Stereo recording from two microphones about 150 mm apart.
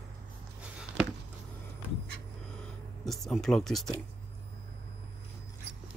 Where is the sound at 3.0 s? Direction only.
Centre (ahead or behind).